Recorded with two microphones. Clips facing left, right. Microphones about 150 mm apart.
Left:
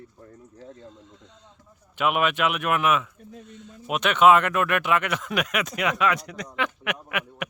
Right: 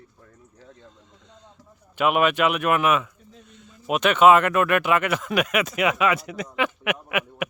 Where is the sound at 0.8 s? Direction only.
Centre (ahead or behind).